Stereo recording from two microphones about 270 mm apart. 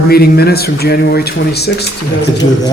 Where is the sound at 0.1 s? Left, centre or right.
Left.